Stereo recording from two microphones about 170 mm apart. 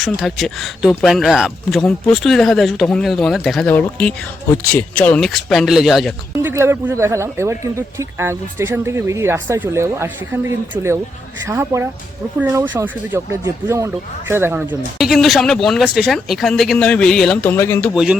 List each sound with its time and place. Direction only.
0.0 s speech: centre (ahead or behind)
6.4 s a man's voice: 15° right (ahead or behind); by 17.9 s 10° left (ahead or behind)
17.9 s speech: 5° right (ahead or behind)